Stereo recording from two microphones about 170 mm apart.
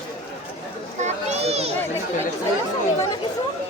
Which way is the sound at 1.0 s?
40° right (ahead or behind).